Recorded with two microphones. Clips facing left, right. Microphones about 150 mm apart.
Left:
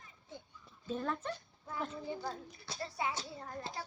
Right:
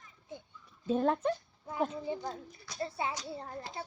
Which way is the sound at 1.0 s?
55° right (ahead or behind).